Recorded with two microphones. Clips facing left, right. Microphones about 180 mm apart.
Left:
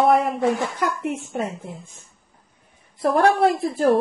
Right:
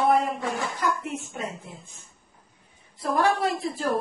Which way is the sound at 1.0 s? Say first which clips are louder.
Left 7 dB; 60° left (ahead or behind).